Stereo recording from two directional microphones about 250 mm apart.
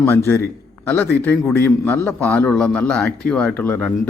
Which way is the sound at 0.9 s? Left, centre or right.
Centre.